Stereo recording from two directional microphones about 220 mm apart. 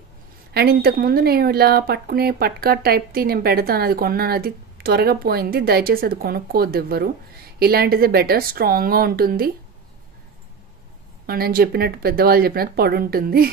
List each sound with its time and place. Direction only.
0.5 s speech: 45° right (ahead or behind)
11.2 s speech: 45° right (ahead or behind)